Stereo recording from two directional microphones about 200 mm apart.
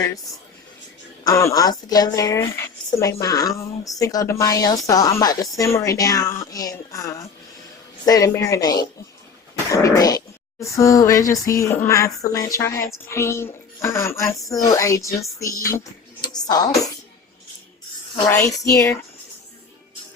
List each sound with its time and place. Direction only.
1.2 s speech: 15° left (ahead or behind)
18.3 s speech: 10° left (ahead or behind)